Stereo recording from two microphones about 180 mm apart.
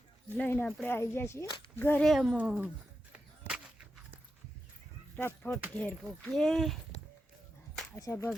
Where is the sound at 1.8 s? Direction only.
10° left (ahead or behind).